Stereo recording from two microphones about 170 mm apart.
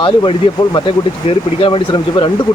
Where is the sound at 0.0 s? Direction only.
25° left (ahead or behind).